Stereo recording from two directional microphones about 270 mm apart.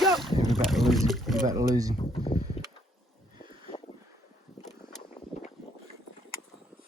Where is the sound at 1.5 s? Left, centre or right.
Centre.